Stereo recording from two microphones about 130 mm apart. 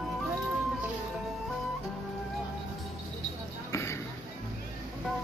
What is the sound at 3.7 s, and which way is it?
Basketball bounce, 20° left (ahead or behind).